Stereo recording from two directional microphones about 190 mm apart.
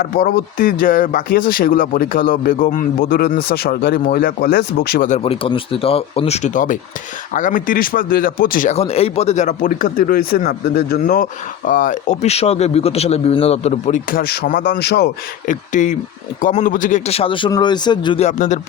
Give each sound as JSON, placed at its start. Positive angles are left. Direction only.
{"t": 0.0, "sound": "speech", "side_deg": 50}
{"t": 5.0, "sound": "speech", "side_deg": 35}
{"t": 14.1, "sound": "speech", "side_deg": 50}
{"t": 15.4, "sound": "a man's voice", "side_deg": 40}
{"t": 18.3, "sound": "speech", "side_deg": 40}